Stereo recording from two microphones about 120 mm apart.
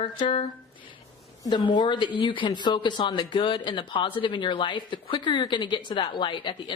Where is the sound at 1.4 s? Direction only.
40° left (ahead or behind).